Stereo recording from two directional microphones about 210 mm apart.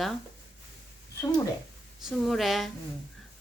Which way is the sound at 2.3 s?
Centre (ahead or behind).